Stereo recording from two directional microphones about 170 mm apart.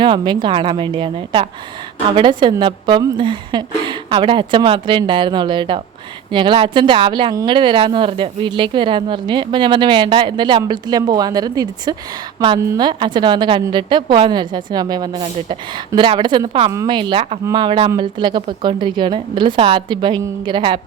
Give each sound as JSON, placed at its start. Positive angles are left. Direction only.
{"t": 0.0, "sound": "speech", "side_deg": -30}